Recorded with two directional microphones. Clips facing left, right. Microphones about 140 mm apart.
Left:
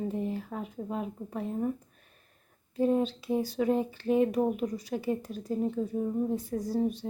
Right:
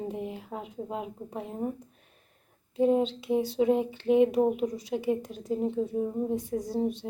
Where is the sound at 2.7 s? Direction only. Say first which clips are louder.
Right 2 dB; 20° right (ahead or behind).